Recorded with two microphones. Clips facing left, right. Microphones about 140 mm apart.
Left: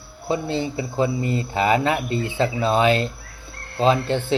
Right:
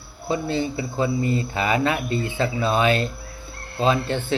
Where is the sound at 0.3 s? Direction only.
25° left (ahead or behind).